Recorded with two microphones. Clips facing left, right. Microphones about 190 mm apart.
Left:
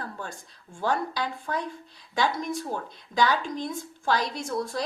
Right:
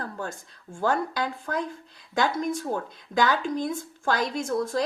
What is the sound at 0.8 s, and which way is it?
Speech, 50° right (ahead or behind).